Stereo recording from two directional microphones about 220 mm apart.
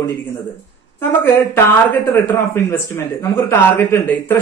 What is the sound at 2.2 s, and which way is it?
A man's voice, 10° left (ahead or behind).